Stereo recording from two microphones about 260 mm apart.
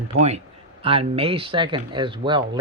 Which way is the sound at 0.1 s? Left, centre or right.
Right.